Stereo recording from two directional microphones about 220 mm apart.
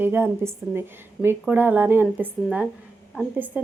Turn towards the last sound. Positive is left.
turn(degrees=-5)  # may be behind; listen again after turning